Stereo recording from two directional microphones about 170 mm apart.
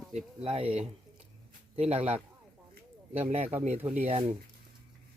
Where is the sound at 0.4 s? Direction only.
35° right (ahead or behind).